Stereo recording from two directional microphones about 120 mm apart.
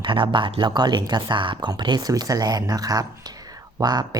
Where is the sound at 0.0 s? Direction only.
45° right (ahead or behind).